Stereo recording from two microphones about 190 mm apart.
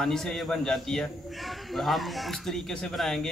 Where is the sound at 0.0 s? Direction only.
Centre (ahead or behind).